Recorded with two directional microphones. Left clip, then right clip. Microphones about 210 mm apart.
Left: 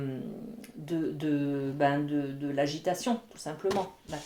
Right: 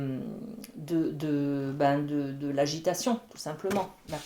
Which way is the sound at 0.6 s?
30° right (ahead or behind).